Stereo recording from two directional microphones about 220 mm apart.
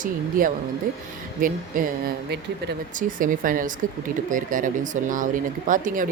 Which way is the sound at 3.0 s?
35° right (ahead or behind).